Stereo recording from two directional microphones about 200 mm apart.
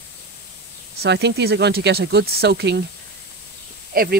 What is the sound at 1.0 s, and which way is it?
Speech, 60° right (ahead or behind).